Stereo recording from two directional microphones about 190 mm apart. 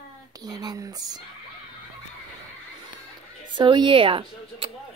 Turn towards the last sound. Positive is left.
turn(degrees=-30)  # may be behind; listen again after turning